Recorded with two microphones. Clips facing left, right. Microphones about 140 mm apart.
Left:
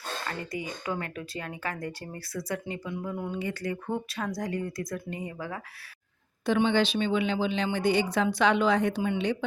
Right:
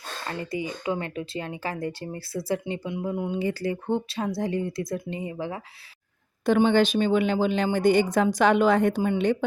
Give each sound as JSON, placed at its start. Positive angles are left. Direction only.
{"t": 0.3, "sound": "speech", "side_deg": -25}
{"t": 6.4, "sound": "speech", "side_deg": -50}